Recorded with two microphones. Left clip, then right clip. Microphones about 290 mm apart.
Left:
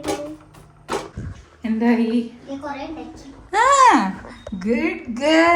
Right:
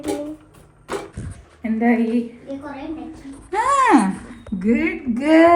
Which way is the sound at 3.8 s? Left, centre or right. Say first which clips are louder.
Left 2 dB; centre.